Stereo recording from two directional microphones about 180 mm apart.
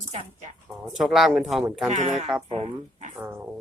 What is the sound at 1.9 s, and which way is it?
Speech, 40° right (ahead or behind).